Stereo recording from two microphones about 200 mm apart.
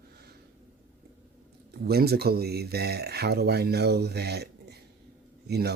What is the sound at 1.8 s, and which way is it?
Speech, 50° right (ahead or behind).